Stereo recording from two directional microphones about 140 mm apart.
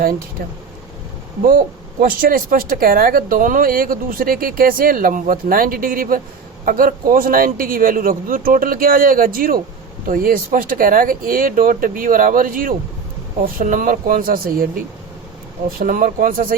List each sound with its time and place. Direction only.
1.5 s speech: 85° right
13.4 s speech: 75° right (ahead or behind)
15.8 s speech: 90° right